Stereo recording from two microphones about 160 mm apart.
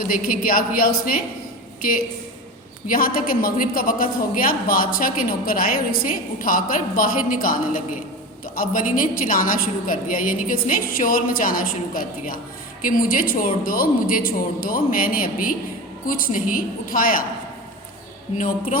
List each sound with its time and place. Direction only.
0.1 s a woman's voice: 65° left (ahead or behind)
2.9 s a woman's voice: 60° left (ahead or behind)